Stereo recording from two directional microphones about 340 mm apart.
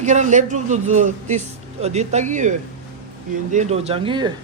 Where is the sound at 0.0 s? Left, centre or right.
Right.